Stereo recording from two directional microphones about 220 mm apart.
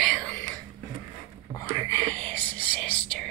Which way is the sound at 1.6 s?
10° left (ahead or behind).